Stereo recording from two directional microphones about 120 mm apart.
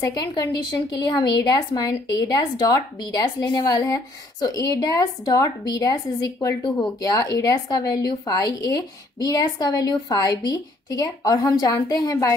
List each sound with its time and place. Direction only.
0.0 s a woman's voice: 35° left (ahead or behind)